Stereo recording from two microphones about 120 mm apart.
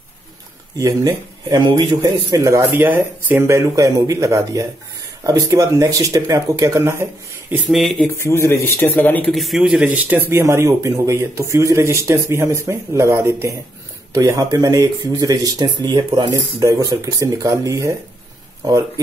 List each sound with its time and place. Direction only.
0.7 s speech: 30° right (ahead or behind)
7.6 s speech: centre (ahead or behind)
8.2 s speech: 20° left (ahead or behind)
9.3 s speech: centre (ahead or behind); by 18.8 s 30° right (ahead or behind)